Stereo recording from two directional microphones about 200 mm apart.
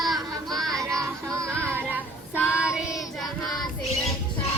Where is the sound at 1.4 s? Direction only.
5° left (ahead or behind).